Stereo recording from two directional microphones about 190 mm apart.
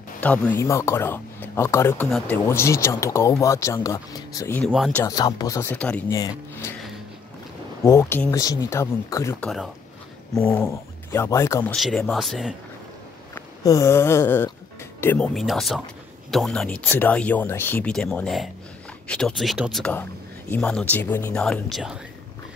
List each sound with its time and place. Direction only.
0.2 s speech: 10° left (ahead or behind)
4.6 s speech: centre (ahead or behind)
4.9 s speech: 20° left (ahead or behind)
7.8 s speech: 15° left (ahead or behind)
10.5 s speech: 10° left (ahead or behind)
11.7 s speech: centre (ahead or behind)
13.3 s speech: 15° left (ahead or behind); by 22.0 s centre (ahead or behind)